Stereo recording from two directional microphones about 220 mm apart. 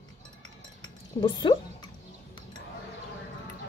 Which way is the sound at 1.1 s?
25° left (ahead or behind).